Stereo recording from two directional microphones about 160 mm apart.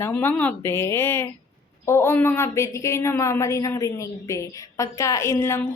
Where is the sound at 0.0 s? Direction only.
10° left (ahead or behind).